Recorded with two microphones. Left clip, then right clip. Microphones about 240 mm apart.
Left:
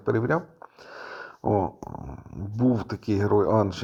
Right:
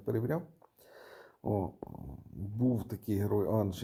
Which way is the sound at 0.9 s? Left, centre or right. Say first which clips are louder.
Left 14 dB; centre.